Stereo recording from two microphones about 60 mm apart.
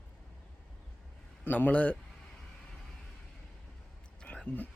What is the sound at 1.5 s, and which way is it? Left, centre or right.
Speech, left.